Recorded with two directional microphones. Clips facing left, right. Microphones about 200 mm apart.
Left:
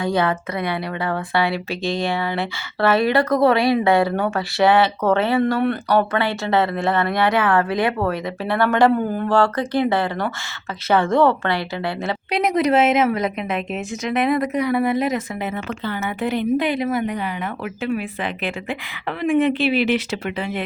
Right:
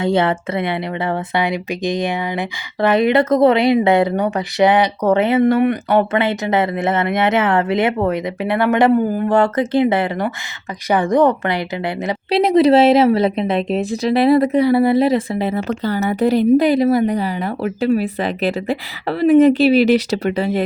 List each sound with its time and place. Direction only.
0.0 s speech: 25° right (ahead or behind)
12.3 s a woman's voice: 30° right (ahead or behind)